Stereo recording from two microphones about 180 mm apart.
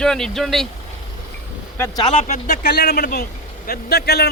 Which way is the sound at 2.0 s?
40° left (ahead or behind).